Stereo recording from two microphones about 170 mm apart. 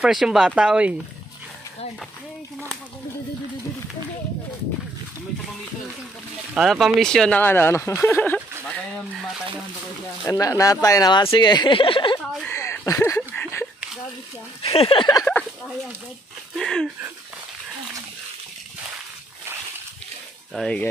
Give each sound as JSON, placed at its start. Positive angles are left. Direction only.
{"t": 0.0, "sound": "speech", "side_deg": 0}
{"t": 6.5, "sound": "speech", "side_deg": 0}
{"t": 10.2, "sound": "speech", "side_deg": 20}
{"t": 12.4, "sound": "a sound", "side_deg": 15}
{"t": 14.6, "sound": "speech", "side_deg": 35}
{"t": 15.2, "sound": "a sound", "side_deg": 10}
{"t": 20.5, "sound": "speech", "side_deg": 5}